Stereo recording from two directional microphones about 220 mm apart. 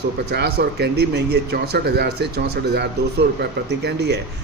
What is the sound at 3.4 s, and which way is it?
Speech, 50° right (ahead or behind).